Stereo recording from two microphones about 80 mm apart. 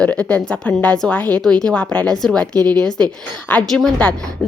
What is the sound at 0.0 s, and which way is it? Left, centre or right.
A woman's voice, centre.